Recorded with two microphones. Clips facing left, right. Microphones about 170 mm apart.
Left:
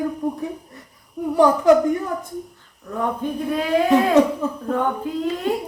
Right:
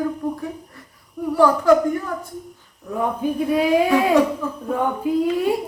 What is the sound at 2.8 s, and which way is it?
Speech, 10° right (ahead or behind).